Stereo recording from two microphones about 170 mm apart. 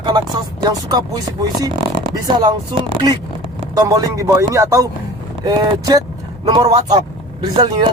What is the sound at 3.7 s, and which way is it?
Speech, 20° right (ahead or behind).